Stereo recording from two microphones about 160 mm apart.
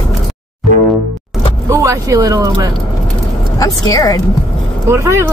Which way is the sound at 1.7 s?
20° right (ahead or behind).